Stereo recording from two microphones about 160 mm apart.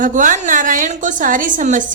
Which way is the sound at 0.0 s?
55° right (ahead or behind).